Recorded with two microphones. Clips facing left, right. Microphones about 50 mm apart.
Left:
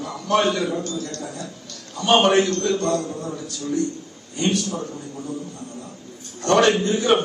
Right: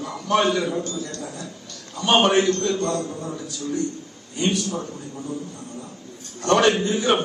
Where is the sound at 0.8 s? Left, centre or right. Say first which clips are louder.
Left 1 dB; right.